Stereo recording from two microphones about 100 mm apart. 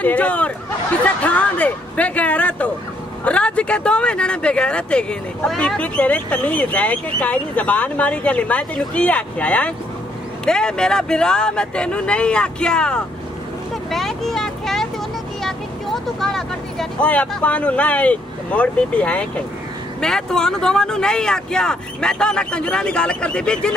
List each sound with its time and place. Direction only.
0.0 s speech: 15° left (ahead or behind)
13.8 s vehicle: centre (ahead or behind)
17.4 s speech: 15° left (ahead or behind)